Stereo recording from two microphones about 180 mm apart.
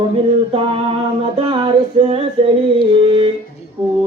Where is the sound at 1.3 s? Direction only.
30° right (ahead or behind).